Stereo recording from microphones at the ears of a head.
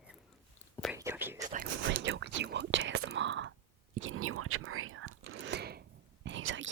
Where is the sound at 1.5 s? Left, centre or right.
Right.